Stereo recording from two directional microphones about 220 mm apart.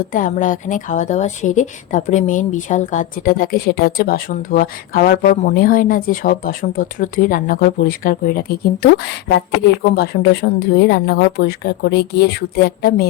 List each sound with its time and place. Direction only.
0.0 s a woman's voice: 35° left (ahead or behind)